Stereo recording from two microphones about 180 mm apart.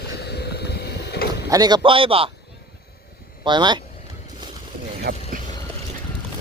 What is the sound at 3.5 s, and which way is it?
Speech, 25° right (ahead or behind).